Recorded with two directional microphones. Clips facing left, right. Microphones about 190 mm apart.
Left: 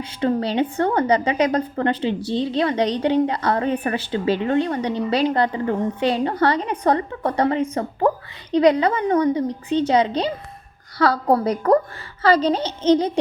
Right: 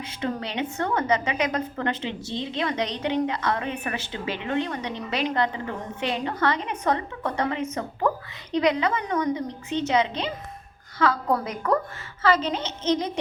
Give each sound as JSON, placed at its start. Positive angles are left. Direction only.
{"t": 0.0, "sound": "a woman's voice", "side_deg": 35}